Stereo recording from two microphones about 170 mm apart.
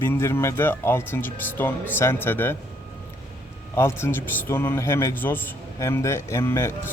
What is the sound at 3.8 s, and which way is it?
Speech, 15° left (ahead or behind).